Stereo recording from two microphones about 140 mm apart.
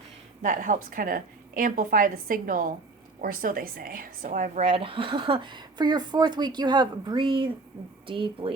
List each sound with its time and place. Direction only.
0.4 s a woman's voice: 70° right (ahead or behind)
3.2 s a woman's voice: 85° right; by 8.5 s 40° right (ahead or behind)